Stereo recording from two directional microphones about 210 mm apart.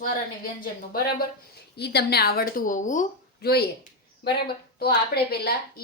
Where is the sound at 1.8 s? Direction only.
50° left (ahead or behind).